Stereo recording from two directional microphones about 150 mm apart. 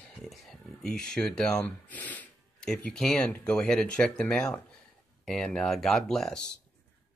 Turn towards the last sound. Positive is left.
turn(degrees=5)  # may be behind; listen again after turning